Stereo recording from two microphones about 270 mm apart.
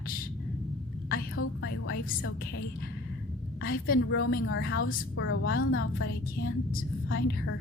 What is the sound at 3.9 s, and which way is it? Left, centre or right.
A woman's voice, left.